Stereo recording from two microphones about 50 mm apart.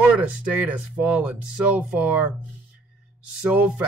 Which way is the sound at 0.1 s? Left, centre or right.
Right.